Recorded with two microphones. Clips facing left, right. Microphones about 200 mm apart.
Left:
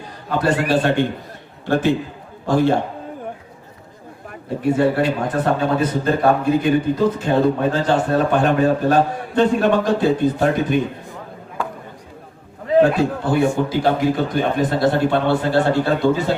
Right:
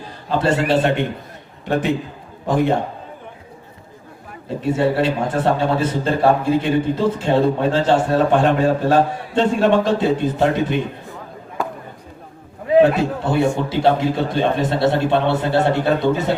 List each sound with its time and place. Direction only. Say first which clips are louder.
0.3 s a man's voice: right 1 dB; 25° right (ahead or behind)
4.4 s a man's voice: left 1 dB; 25° right (ahead or behind)
13.2 s a man's voice: even; 25° right (ahead or behind)